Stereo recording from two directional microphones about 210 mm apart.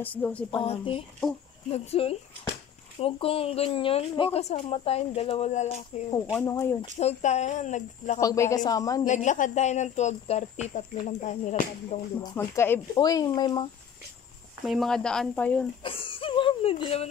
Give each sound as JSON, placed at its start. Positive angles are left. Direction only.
{"t": 0.0, "sound": "speech", "side_deg": 5}
{"t": 0.5, "sound": "speech", "side_deg": 25}
{"t": 6.4, "sound": "speech", "side_deg": 15}
{"t": 7.0, "sound": "speech", "side_deg": 30}
{"t": 8.2, "sound": "speech", "side_deg": 15}
{"t": 9.0, "sound": "speech", "side_deg": 35}
{"t": 12.2, "sound": "speech", "side_deg": 10}
{"t": 14.6, "sound": "speech", "side_deg": 0}
{"t": 15.8, "sound": "speech", "side_deg": 25}